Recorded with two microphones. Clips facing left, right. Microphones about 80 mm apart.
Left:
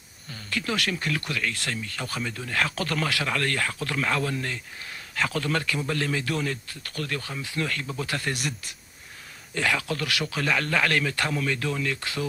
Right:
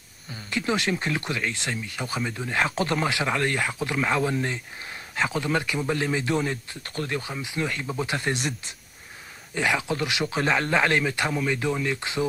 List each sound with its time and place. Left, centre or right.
0.3 s speech: right
9.5 s speech: centre